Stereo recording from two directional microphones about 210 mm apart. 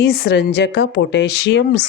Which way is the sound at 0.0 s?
50° left (ahead or behind).